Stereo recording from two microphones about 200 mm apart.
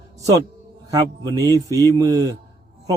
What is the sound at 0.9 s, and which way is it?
A man's voice, 20° right (ahead or behind).